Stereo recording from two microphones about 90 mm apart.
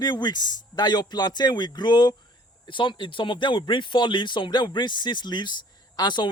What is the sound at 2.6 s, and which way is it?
Speech, 65° left (ahead or behind).